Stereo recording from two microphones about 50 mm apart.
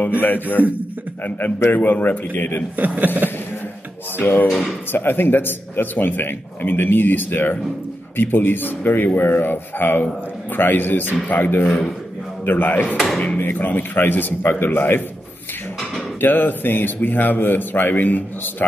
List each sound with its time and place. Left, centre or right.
0.2 s speech: left
1.7 s speech: left
2.7 s a man's voice: right
4.2 s speech: left
4.5 s speech: centre
4.9 s speech: left
11.6 s a man's voice: centre
12.4 s speech: left
16.2 s speech: left